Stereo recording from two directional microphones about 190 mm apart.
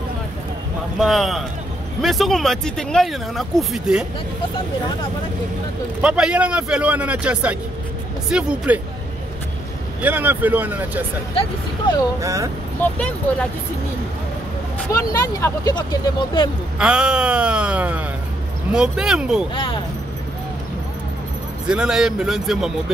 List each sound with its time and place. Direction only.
0.9 s speech: centre (ahead or behind)
5.9 s speech: 5° right (ahead or behind)
10.0 s speech: 10° right (ahead or behind)
12.2 s speech: 15° right (ahead or behind)
14.9 s speech: 15° left (ahead or behind)
16.7 s speech: 5° right (ahead or behind)
19.5 s speech: 25° left (ahead or behind)
21.6 s speech: 5° right (ahead or behind)